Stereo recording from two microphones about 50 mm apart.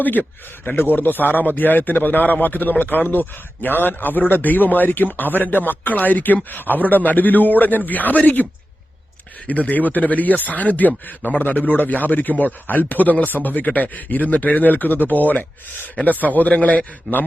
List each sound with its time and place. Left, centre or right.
0.0 s speech: left
9.5 s speech: left